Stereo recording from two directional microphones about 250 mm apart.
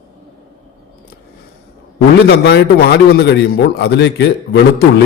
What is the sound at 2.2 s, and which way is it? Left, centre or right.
A man's voice, left.